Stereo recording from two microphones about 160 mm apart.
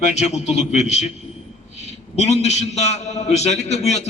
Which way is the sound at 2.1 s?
45° left (ahead or behind).